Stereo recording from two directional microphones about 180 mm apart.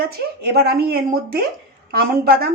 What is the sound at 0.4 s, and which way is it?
Speech, 60° right (ahead or behind).